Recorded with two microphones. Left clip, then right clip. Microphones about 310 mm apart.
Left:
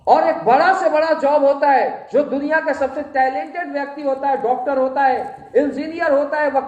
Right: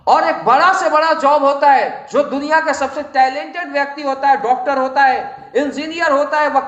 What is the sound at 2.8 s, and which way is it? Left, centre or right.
Speech, right.